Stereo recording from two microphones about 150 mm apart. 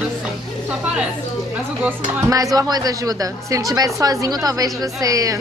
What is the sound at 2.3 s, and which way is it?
A woman's voice, 25° right (ahead or behind).